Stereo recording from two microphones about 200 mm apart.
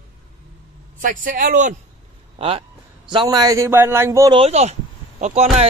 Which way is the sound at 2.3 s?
30° right (ahead or behind).